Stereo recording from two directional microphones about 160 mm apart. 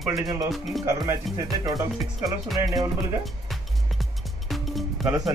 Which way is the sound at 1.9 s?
Centre (ahead or behind).